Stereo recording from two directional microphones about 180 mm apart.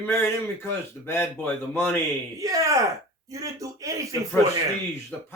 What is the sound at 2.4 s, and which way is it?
A man's voice, 20° right (ahead or behind).